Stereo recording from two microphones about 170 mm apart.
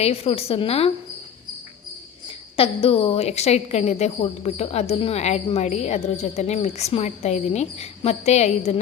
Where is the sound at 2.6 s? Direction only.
35° left (ahead or behind).